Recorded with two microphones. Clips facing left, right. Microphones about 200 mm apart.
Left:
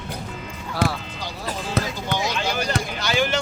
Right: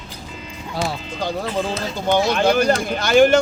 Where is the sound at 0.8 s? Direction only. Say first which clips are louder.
Left 2 dB; 60° left (ahead or behind).